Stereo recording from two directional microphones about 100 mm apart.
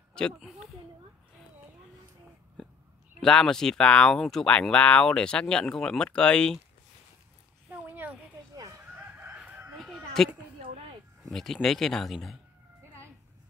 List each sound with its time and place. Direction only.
0.4 s speech: 5° right (ahead or behind)
3.2 s speech: 5° left (ahead or behind)
7.7 s a sound: 15° right (ahead or behind)
8.9 s chicken: 15° right (ahead or behind)
9.8 s a sound: 5° left (ahead or behind)
11.2 s speech: 5° left (ahead or behind)